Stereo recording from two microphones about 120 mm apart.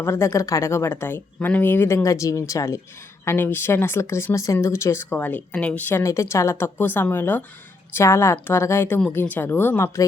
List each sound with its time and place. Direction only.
0.0 s a woman's voice: 25° left (ahead or behind)